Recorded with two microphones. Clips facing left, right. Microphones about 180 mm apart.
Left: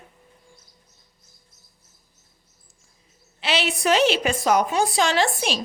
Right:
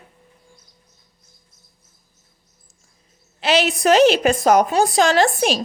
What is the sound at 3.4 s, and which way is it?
Speech, 40° right (ahead or behind).